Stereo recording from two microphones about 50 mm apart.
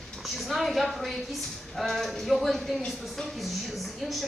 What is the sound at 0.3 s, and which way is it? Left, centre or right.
A woman's voice, centre.